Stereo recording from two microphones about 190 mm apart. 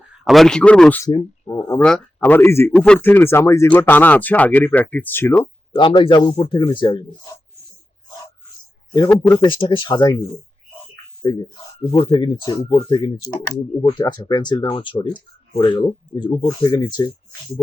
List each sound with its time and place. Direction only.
0.3 s speech: centre (ahead or behind)
1.0 s speech: 20° left (ahead or behind)
5.7 s speech: 25° left (ahead or behind)
8.9 s speech: 20° left (ahead or behind)
11.2 s speech: 25° left (ahead or behind)